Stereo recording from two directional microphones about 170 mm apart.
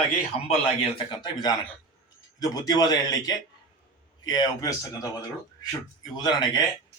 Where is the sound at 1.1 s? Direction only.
25° left (ahead or behind).